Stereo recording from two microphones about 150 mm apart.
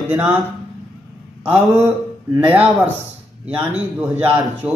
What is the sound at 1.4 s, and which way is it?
A man's voice, 10° right (ahead or behind).